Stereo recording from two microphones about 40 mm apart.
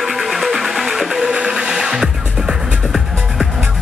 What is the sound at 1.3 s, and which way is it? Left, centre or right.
Music, right.